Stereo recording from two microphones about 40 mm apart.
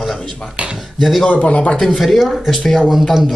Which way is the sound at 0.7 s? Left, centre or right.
Centre.